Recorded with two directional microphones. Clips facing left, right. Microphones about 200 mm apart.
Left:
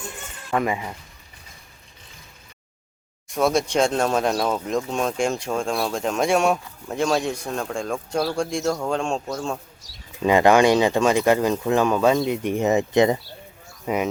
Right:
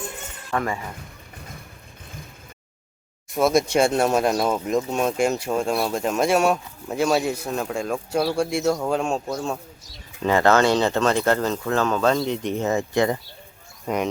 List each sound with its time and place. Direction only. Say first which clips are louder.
0.5 s speech: left 3 dB; 15° left (ahead or behind)
3.2 s speech: right 1 dB; 5° right (ahead or behind)
10.2 s speech: left 2 dB; 15° left (ahead or behind)
13.8 s speech: left 1 dB; 5° left (ahead or behind)